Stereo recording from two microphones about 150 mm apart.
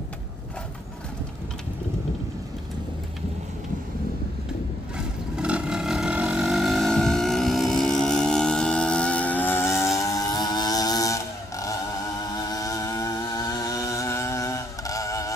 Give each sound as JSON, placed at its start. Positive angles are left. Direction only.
{"t": 4.9, "sound": "vehicle", "side_deg": -5}